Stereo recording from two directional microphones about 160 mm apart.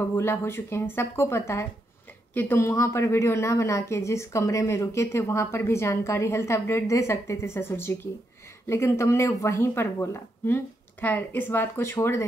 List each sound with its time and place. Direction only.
0.1 s speech: 15° left (ahead or behind)